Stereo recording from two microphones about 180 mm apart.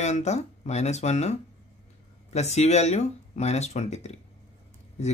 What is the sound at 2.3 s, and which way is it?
Speech, 35° left (ahead or behind).